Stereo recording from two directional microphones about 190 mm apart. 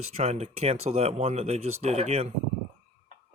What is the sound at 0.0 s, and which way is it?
Speech, 35° right (ahead or behind).